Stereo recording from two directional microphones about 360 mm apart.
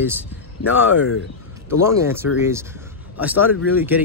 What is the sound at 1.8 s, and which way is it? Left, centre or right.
Speech, centre.